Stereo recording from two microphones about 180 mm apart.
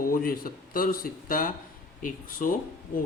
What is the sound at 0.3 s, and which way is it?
Speech, 55° left (ahead or behind).